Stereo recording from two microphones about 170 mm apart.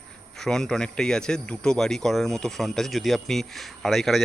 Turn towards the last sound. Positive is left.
turn(degrees=0)  # may be behind; listen again after turning